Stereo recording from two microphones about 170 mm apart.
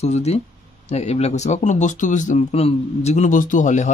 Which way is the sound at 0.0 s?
40° left (ahead or behind).